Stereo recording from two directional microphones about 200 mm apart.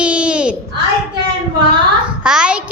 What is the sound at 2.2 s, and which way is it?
Speech, 5° right (ahead or behind).